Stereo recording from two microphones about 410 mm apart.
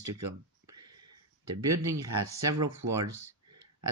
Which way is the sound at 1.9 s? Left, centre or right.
Centre.